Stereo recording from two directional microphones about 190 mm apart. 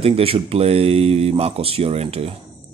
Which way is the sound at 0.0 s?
30° right (ahead or behind).